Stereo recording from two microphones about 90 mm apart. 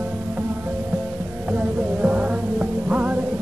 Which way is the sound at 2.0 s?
15° right (ahead or behind).